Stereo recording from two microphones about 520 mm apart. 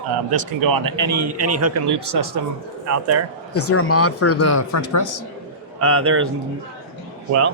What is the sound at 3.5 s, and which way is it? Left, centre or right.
Speech, left.